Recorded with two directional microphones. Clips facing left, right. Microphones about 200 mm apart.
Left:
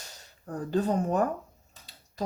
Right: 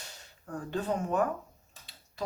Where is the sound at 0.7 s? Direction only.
40° left (ahead or behind).